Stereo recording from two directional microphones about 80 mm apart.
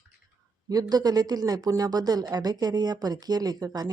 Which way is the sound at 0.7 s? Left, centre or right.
Right.